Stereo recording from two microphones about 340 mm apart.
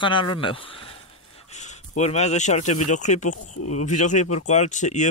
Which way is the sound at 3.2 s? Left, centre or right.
Left.